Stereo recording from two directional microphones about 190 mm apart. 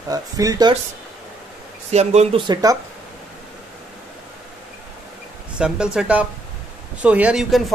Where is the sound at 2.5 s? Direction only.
20° right (ahead or behind).